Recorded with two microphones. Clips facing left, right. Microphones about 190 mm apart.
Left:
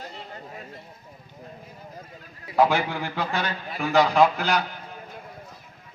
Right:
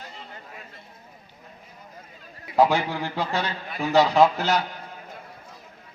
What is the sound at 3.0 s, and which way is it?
A man's voice, 30° right (ahead or behind).